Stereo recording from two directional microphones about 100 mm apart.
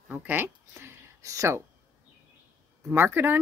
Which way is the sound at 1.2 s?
30° right (ahead or behind).